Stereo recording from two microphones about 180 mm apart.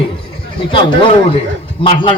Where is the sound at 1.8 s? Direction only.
25° left (ahead or behind).